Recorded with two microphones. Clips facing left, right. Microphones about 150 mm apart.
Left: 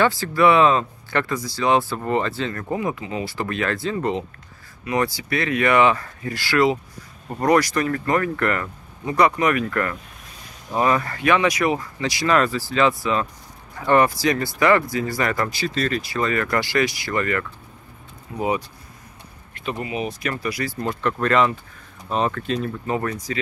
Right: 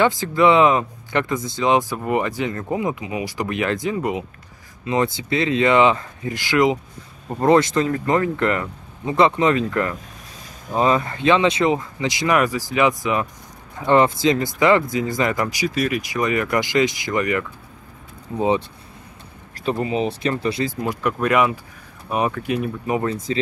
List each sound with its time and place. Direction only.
0.0 s speech: 20° right (ahead or behind)
4.8 s speech: 20° right (ahead or behind)
18.3 s speech: 30° right (ahead or behind)
19.5 s speech: 35° right (ahead or behind); by 23.1 s 15° right (ahead or behind)